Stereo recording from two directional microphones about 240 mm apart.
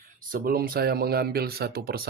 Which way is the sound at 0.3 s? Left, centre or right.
Right.